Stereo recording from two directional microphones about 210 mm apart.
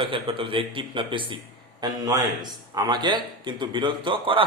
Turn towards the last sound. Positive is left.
turn(degrees=-25)  # may be behind; listen again after turning